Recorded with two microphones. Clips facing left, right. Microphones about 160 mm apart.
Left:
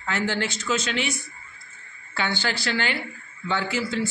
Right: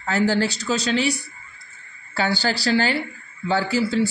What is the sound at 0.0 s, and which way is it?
A man's voice, 35° right (ahead or behind).